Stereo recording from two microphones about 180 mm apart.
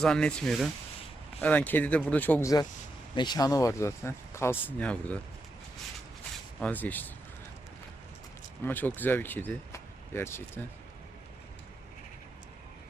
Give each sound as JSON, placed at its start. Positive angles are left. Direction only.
{"t": 0.0, "sound": "speech", "side_deg": 5}
{"t": 6.6, "sound": "speech", "side_deg": 10}
{"t": 8.6, "sound": "speech", "side_deg": 10}